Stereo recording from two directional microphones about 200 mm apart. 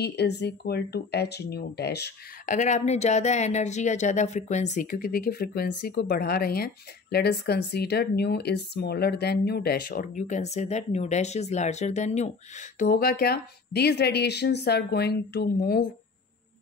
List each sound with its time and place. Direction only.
0.0 s speech: 55° left (ahead or behind)
2.4 s speech: 40° left (ahead or behind)
4.9 s speech: 50° left (ahead or behind)